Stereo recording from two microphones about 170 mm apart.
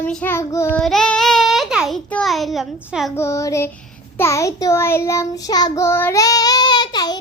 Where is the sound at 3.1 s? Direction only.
15° left (ahead or behind).